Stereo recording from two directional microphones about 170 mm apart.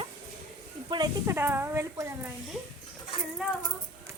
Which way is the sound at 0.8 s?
25° right (ahead or behind).